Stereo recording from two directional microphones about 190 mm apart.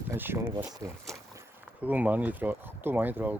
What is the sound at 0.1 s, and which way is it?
Speech, 15° right (ahead or behind).